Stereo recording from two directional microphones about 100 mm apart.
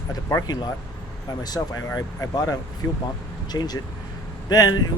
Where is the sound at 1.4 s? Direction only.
40° left (ahead or behind).